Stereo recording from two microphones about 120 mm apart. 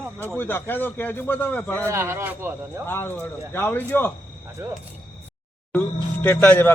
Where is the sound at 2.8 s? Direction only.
20° left (ahead or behind).